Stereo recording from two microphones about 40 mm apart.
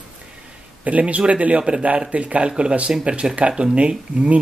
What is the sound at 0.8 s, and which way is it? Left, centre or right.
Speech, right.